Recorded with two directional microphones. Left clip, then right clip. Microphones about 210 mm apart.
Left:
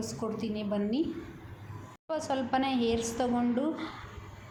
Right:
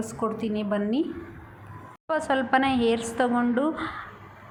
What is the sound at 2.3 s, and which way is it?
A woman's voice, 15° right (ahead or behind).